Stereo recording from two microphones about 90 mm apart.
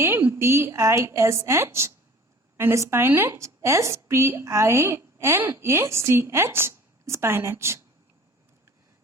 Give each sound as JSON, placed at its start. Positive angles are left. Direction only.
{"t": 0.0, "sound": "a woman's voice", "side_deg": -25}